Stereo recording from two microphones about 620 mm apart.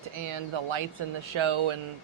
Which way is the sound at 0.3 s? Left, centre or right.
Right.